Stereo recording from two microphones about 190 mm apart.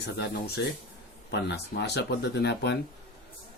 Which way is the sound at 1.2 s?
60° left (ahead or behind).